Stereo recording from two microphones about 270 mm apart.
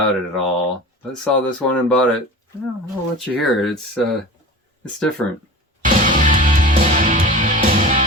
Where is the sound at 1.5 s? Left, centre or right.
Centre.